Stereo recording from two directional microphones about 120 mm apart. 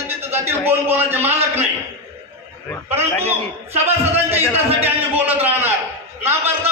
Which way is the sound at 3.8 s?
20° right (ahead or behind).